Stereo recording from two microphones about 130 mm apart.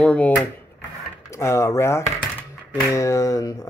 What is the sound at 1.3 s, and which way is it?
Speech, 20° left (ahead or behind).